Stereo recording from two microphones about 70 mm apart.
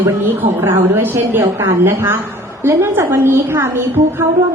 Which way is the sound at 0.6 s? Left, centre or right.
Right.